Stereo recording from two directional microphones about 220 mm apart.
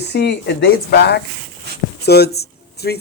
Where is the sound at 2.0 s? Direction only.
45° left (ahead or behind).